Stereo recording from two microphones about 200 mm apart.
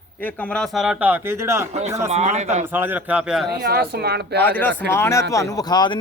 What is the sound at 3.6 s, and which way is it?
Speech, 55° right (ahead or behind).